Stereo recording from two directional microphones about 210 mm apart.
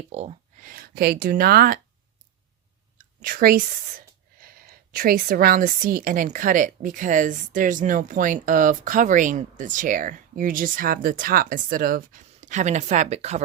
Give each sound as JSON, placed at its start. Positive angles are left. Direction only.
{"t": 0.1, "sound": "speech", "side_deg": -30}
{"t": 3.0, "sound": "speech", "side_deg": -40}